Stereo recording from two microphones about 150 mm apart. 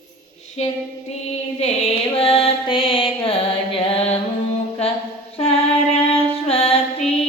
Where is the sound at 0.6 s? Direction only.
45° left (ahead or behind).